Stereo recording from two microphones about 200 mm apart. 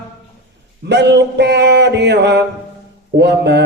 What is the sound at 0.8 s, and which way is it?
Mantra, 60° right (ahead or behind).